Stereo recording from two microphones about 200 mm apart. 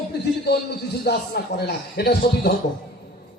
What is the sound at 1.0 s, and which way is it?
A man's voice, 55° left (ahead or behind).